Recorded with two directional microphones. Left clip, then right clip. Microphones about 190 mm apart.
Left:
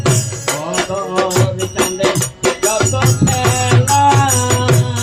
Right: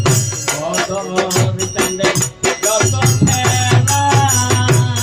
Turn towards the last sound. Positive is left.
turn(degrees=-25)  # may be behind; listen again after turning